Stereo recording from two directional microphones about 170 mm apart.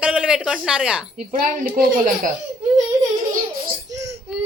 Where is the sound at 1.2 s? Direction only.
55° right (ahead or behind).